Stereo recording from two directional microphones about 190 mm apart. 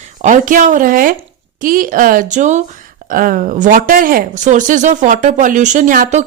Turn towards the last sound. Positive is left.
turn(degrees=-45)  # may be behind; listen again after turning